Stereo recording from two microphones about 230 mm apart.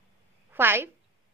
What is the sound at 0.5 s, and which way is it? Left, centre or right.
Speech, centre.